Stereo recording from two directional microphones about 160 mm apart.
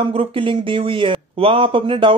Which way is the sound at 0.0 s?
35° right (ahead or behind).